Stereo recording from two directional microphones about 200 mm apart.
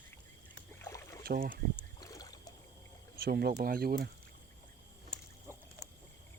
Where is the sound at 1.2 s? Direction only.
50° right (ahead or behind).